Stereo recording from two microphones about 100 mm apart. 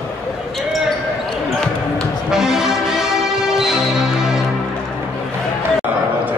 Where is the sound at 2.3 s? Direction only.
5° right (ahead or behind).